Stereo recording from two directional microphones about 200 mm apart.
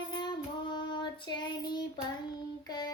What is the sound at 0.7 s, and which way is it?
Child singing, 25° left (ahead or behind).